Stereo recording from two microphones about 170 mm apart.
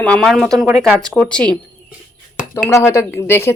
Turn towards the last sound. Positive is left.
turn(degrees=15)  # may be behind; listen again after turning